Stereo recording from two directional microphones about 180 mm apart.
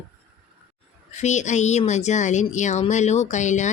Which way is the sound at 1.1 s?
40° left (ahead or behind).